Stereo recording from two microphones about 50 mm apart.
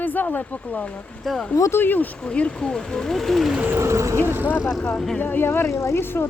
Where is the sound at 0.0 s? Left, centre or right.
Left.